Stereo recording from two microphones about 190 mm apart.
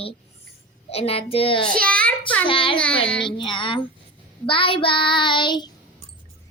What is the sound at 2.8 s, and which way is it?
Child singing, 5° left (ahead or behind).